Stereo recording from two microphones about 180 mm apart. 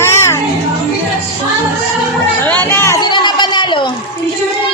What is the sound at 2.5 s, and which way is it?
Chatter, 15° left (ahead or behind).